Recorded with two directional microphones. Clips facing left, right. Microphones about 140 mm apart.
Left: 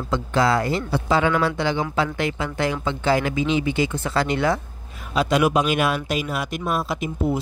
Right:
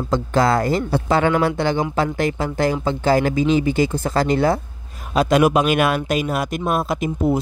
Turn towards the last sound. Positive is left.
turn(degrees=-45)  # may be behind; listen again after turning